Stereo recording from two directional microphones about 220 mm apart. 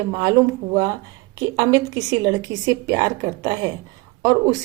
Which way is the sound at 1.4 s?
15° right (ahead or behind).